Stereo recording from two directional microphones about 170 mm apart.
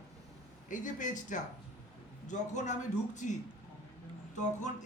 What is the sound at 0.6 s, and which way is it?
A man's voice, 50° left (ahead or behind).